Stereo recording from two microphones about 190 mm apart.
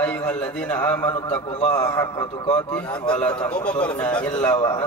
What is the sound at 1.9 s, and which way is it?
Speech, 20° left (ahead or behind).